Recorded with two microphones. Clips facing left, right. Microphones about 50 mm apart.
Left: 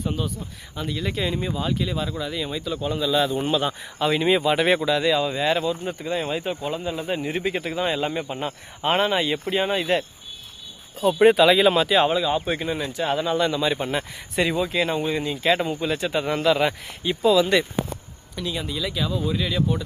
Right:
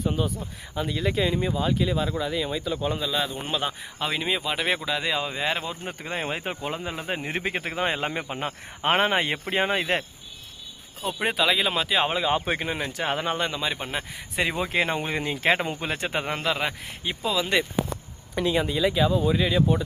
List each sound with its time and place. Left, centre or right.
0.2 s speech: centre
4.9 s speech: centre
5.6 s speech: right
11.2 s speech: centre
12.0 s speech: right
13.5 s speech: centre
14.5 s speech: right
16.2 s speech: centre
18.3 s speech: right